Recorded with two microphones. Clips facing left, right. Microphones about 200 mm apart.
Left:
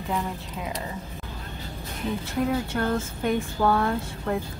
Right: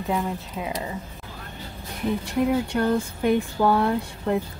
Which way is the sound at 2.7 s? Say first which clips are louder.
Right 3 dB; 15° right (ahead or behind).